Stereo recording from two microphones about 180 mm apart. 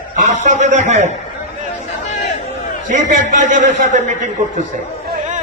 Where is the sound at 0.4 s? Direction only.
40° right (ahead or behind).